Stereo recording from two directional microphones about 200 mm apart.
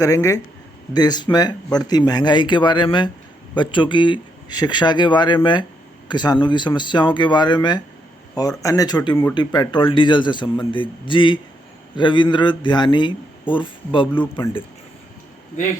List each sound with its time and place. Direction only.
0.0 s speech: 15° left (ahead or behind)